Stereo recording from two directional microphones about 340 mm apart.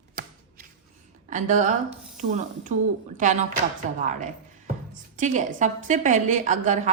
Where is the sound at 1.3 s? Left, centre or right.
Right.